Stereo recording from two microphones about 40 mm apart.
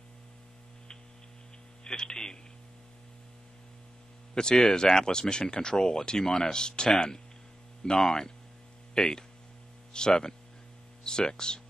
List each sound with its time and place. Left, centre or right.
1.9 s speech: centre
4.4 s speech: centre